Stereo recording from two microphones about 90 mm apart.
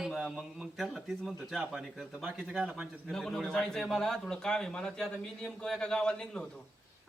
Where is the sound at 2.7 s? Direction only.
10° right (ahead or behind).